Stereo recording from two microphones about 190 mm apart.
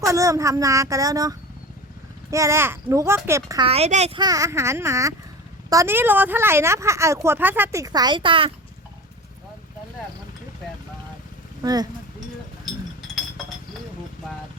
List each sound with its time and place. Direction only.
0.0 s speech: 15° right (ahead or behind)
3.7 s speech: 35° right (ahead or behind)
4.2 s speech: 20° right (ahead or behind)
11.6 s speech: 20° right (ahead or behind)